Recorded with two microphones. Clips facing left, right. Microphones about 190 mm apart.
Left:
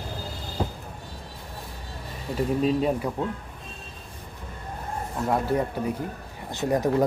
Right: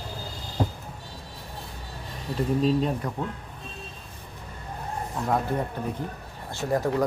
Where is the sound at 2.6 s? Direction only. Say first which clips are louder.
Left 2 dB; 10° left (ahead or behind).